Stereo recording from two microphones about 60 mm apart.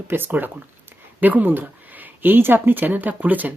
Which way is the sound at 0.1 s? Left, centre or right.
Right.